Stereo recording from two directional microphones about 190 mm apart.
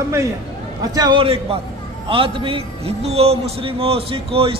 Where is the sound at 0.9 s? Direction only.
25° right (ahead or behind).